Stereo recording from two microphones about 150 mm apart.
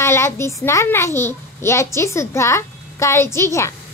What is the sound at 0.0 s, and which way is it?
A child's voice, 20° left (ahead or behind).